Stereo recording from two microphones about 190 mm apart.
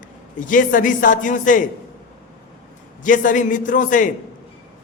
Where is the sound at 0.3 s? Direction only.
45° left (ahead or behind).